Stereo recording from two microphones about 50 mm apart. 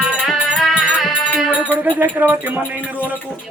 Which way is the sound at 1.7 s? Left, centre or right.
Right.